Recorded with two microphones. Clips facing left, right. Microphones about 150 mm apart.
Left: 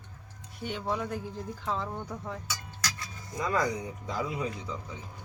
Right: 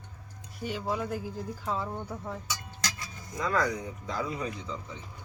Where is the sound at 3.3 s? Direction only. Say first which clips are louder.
Even; 15° left (ahead or behind).